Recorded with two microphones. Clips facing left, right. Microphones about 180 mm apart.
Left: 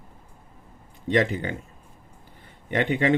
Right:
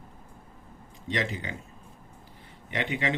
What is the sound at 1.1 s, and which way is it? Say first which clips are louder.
Speech: left 9 dB; 55° left (ahead or behind).